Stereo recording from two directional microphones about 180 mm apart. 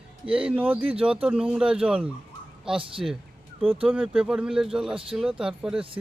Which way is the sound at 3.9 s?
5° right (ahead or behind).